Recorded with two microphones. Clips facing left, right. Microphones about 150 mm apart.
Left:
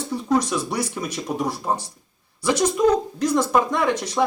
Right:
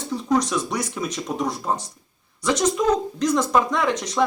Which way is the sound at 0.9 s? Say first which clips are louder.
Even; 10° left (ahead or behind).